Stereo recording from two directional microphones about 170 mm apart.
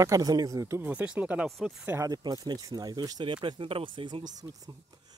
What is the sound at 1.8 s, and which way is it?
Speech, 20° right (ahead or behind).